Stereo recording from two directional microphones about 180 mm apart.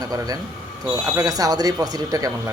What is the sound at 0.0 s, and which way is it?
Speech, 20° right (ahead or behind).